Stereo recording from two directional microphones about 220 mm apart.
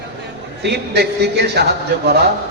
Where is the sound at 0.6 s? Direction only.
50° right (ahead or behind).